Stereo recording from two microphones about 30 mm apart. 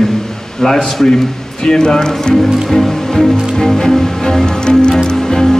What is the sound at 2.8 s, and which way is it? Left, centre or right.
Music, centre.